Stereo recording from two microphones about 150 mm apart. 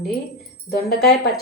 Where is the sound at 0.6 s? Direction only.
90° left.